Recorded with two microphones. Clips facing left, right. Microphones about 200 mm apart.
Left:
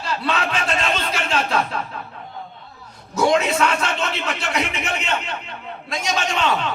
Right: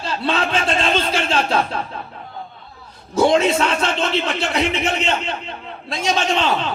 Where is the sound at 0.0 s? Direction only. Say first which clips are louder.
Right 2 dB; 30° right (ahead or behind).